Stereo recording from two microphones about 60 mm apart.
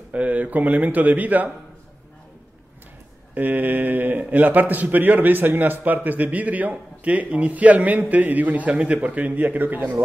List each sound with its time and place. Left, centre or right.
0.1 s a man's voice: right
3.3 s a man's voice: right